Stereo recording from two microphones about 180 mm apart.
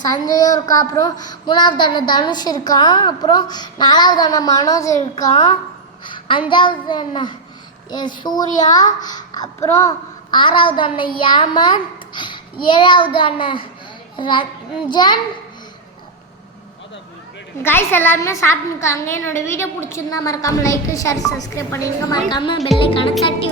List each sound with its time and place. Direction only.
0.0 s speech: 20° left (ahead or behind)
6.1 s a sound: 30° left (ahead or behind)
6.5 s a child's voice: 25° left (ahead or behind)
10.3 s a child's voice: 25° left (ahead or behind)
17.6 s a woman's voice: 10° left (ahead or behind); by 23.1 s 30° left (ahead or behind)